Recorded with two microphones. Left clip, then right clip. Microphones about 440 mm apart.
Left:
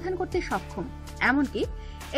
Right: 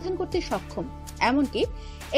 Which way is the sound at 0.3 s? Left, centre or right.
Centre.